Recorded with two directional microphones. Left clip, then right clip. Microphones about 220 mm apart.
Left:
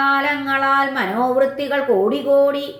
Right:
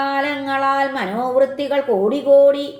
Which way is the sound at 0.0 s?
35° right (ahead or behind).